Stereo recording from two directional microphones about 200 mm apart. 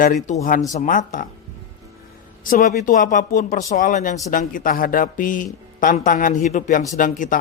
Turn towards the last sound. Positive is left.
turn(degrees=40)  # may be behind; listen again after turning